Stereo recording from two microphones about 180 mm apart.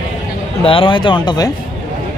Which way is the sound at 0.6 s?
30° left (ahead or behind).